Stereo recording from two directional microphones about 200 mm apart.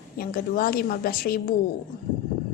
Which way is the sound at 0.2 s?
45° left (ahead or behind).